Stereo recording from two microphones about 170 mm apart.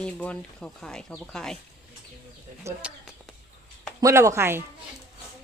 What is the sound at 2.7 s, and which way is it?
Speech, 15° right (ahead or behind).